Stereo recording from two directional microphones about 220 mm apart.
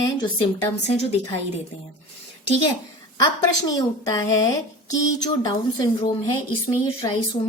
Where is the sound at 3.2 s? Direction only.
15° left (ahead or behind).